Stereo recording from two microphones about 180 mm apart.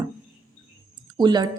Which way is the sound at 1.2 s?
25° right (ahead or behind).